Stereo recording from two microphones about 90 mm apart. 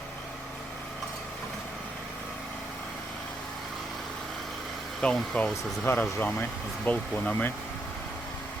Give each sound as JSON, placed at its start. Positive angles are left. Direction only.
{"t": 5.0, "sound": "speech", "side_deg": 5}
{"t": 5.8, "sound": "speech", "side_deg": 25}